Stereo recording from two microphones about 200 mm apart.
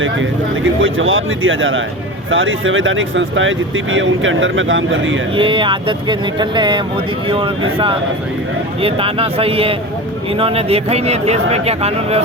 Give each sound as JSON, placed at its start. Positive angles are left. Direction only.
{"t": 0.0, "sound": "speech", "side_deg": -75}
{"t": 5.4, "sound": "speech", "side_deg": -25}